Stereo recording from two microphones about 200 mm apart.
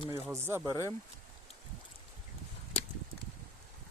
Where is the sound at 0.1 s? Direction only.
15° right (ahead or behind).